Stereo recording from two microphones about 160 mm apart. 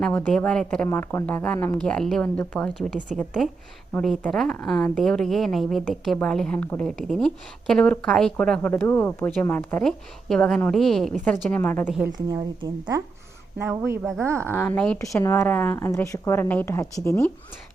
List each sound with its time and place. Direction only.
0.0 s a woman's voice: 10° left (ahead or behind)
0.9 s a woman's voice: 15° left (ahead or behind)
12.1 s speech: 25° right (ahead or behind)
14.4 s a woman's voice: 15° left (ahead or behind)